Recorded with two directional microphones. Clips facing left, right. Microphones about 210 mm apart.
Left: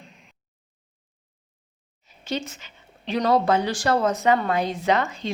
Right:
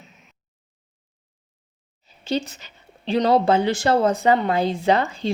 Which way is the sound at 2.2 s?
35° right (ahead or behind).